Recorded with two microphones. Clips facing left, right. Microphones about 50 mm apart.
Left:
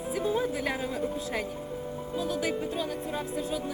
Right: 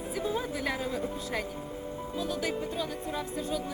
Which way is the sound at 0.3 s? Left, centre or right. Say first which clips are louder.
Left 3 dB; centre.